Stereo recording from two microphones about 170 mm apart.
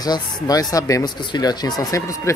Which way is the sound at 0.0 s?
20° left (ahead or behind).